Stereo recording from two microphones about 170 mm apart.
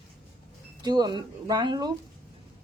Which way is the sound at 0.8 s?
25° right (ahead or behind).